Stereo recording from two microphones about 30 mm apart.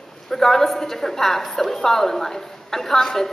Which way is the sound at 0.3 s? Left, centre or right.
Centre.